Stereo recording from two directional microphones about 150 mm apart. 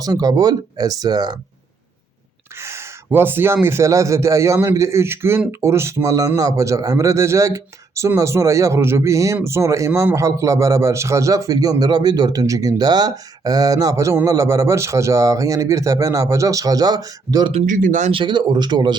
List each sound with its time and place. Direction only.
0.0 s speech: 25° right (ahead or behind)
2.6 s speech: 15° right (ahead or behind)
17.7 s speech: 55° right (ahead or behind)
18.1 s speech: 35° right (ahead or behind)